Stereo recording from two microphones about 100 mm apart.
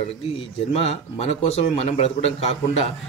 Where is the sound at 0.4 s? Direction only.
75° left (ahead or behind).